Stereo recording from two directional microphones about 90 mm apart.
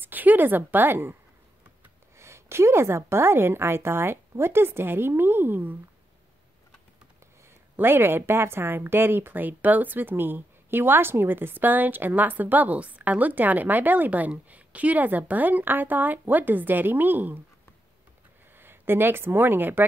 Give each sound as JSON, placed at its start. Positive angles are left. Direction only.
{"t": 0.0, "sound": "speech", "side_deg": -20}
{"t": 2.1, "sound": "a sound", "side_deg": -30}
{"t": 3.1, "sound": "a woman's voice", "side_deg": -25}
{"t": 7.7, "sound": "a woman's voice", "side_deg": -25}
{"t": 18.6, "sound": "a woman's voice", "side_deg": -25}